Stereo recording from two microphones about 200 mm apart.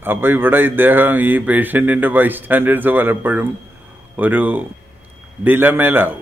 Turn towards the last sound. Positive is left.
turn(degrees=-10)  # may be behind; listen again after turning